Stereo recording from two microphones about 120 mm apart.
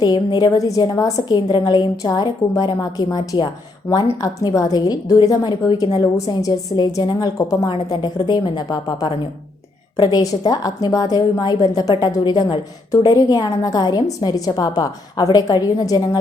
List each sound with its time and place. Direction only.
0.0 s a woman's voice: 35° left (ahead or behind)